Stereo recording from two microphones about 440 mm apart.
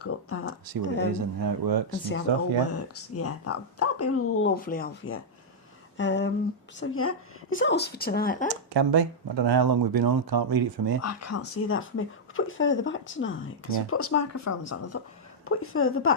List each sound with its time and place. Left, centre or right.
0.0 s speech: left
1.1 s speech: right
2.3 s speech: right
2.7 s speech: left
8.7 s speech: right
11.0 s speech: left